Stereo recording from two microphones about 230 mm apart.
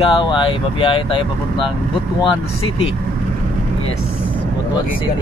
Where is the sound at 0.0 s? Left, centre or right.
Left.